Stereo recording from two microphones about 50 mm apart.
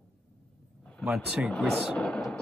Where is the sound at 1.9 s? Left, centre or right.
Centre.